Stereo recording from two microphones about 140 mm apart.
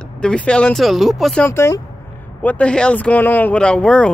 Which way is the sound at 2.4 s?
10° left (ahead or behind).